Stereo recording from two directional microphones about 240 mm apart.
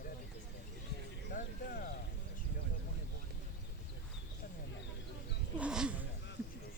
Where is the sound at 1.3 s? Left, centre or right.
Left.